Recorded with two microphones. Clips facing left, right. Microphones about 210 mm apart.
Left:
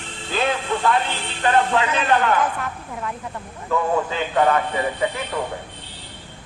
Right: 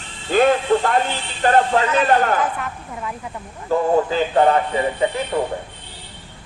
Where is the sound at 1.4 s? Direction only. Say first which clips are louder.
Right 3 dB; 40° right (ahead or behind).